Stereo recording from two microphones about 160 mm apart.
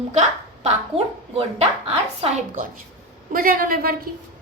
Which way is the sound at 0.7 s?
40° right (ahead or behind).